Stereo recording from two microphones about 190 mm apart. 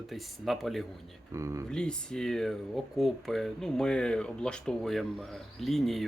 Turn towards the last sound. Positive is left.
turn(degrees=0)  # may be behind; listen again after turning